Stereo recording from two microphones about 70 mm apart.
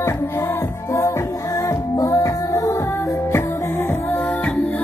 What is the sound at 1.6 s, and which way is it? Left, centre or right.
Music, left.